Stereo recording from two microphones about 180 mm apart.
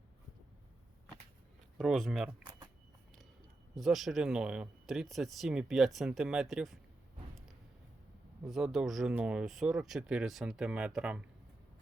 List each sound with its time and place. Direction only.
1.8 s speech: centre (ahead or behind)
2.4 s a sound: 25° right (ahead or behind)
3.8 s speech: centre (ahead or behind)
8.4 s speech: centre (ahead or behind)